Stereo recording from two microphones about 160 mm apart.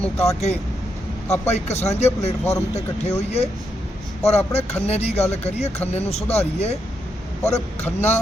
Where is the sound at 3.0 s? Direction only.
45° left (ahead or behind).